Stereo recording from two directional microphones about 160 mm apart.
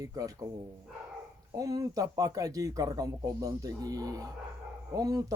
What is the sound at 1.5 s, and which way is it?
Speech, 20° right (ahead or behind).